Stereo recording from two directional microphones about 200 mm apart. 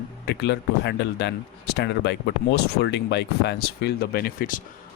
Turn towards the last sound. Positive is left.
turn(degrees=45)  # may be behind; listen again after turning